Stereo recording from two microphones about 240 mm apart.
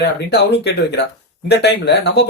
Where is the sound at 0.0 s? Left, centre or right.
Left.